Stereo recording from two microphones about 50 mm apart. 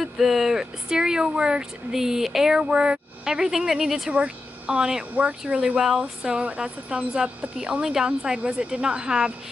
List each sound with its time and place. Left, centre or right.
0.0 s speech: centre
4.1 s speech: right